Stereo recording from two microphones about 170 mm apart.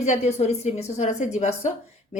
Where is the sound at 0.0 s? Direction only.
45° left (ahead or behind).